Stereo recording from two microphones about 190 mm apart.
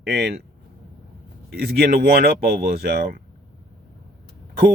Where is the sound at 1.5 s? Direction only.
55° right (ahead or behind).